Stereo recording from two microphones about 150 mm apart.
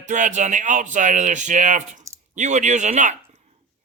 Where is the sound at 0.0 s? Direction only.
55° right (ahead or behind).